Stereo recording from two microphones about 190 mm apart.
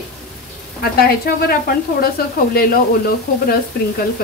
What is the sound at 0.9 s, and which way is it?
Speech, 55° left (ahead or behind).